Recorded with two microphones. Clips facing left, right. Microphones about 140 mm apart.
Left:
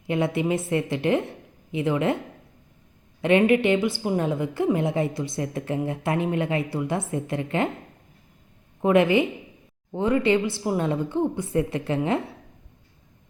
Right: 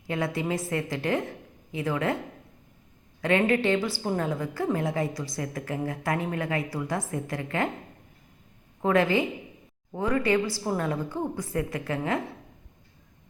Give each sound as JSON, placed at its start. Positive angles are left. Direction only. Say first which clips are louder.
{"t": 0.1, "sound": "a woman's voice", "louder": "left 5 dB", "side_deg": 20}
{"t": 3.2, "sound": "a woman's voice", "louder": "left 5 dB", "side_deg": 20}
{"t": 8.8, "sound": "a woman's voice", "louder": "left 4 dB", "side_deg": 20}